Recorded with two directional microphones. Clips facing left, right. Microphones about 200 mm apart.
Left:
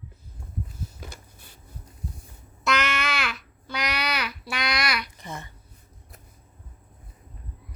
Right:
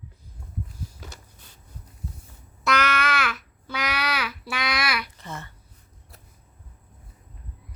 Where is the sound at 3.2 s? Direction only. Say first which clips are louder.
Right 3 dB; 5° right (ahead or behind).